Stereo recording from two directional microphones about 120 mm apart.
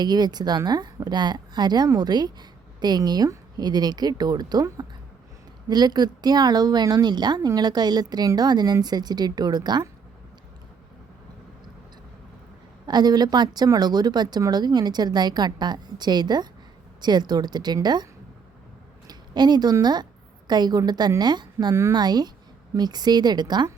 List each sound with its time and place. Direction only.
0.0 s a woman's voice: 35° right (ahead or behind)
12.8 s a woman's voice: 35° right (ahead or behind)
19.0 s a sound: 35° right (ahead or behind)
19.7 s a woman's voice: 35° right (ahead or behind)